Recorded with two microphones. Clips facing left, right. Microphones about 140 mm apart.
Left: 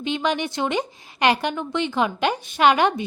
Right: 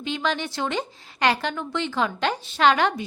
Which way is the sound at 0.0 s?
20° left (ahead or behind).